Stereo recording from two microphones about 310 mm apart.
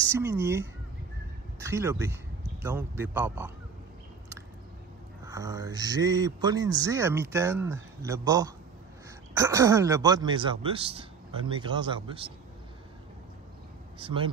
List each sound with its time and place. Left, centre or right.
0.1 s speech: centre
5.2 s speech: centre
13.9 s speech: centre